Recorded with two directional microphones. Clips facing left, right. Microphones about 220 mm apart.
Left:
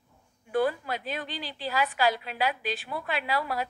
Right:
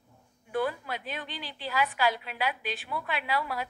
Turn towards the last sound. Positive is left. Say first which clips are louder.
# left 2 dB
turn(degrees=40)  # may be behind; listen again after turning